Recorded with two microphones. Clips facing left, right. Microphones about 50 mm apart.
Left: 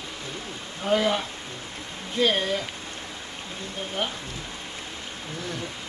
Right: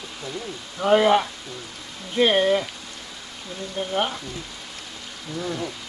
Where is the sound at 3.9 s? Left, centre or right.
Right.